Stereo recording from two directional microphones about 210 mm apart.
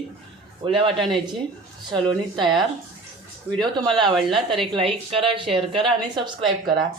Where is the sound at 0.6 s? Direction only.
25° right (ahead or behind).